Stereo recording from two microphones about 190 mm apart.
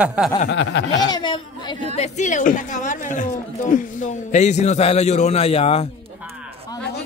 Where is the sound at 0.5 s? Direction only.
70° left (ahead or behind).